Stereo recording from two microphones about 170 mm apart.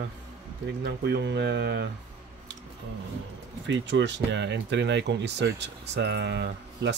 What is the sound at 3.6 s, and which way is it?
Speech, 90° right.